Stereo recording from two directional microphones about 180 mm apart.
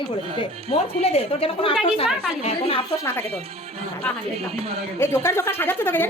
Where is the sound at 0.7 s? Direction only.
35° left (ahead or behind).